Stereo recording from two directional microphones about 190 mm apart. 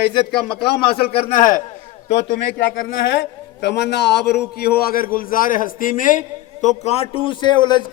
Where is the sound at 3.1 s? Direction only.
65° left (ahead or behind); by 6.2 s 45° left (ahead or behind).